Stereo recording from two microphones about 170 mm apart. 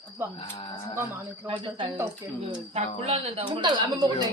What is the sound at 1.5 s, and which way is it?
Speech, 30° right (ahead or behind).